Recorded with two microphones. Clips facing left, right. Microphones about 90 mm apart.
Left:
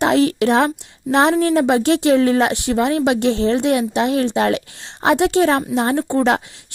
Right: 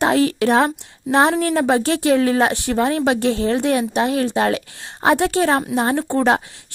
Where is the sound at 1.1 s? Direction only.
20° right (ahead or behind).